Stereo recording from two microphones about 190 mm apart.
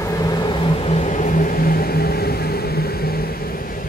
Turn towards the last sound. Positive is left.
turn(degrees=55)  # may be behind; listen again after turning